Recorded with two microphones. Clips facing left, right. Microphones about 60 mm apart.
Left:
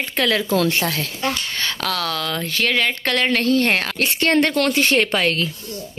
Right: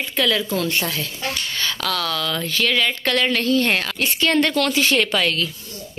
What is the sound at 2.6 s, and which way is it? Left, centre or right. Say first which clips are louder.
A woman's voice: left 1 dB; left.